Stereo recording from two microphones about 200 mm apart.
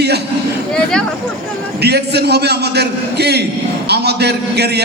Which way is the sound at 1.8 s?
55° right (ahead or behind).